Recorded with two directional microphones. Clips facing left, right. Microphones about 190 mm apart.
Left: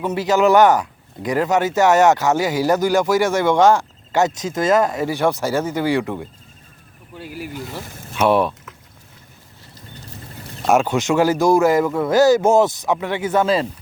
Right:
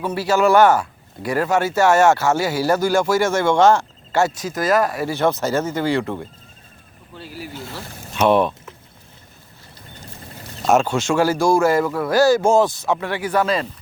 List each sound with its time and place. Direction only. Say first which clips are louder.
0.0 s speech: left 1 dB; 20° left (ahead or behind)
7.3 s speech: left 2 dB; 15° left (ahead or behind)
10.7 s speech: left 1 dB; 15° left (ahead or behind)